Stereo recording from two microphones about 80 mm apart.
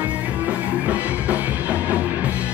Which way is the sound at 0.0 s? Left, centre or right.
Centre.